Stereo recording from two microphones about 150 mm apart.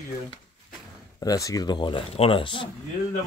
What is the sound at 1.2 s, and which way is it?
Speech, 25° left (ahead or behind).